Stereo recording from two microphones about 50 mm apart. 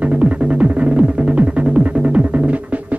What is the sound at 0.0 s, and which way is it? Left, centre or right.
Music, right.